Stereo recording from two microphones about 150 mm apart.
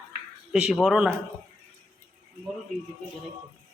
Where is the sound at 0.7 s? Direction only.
5° right (ahead or behind).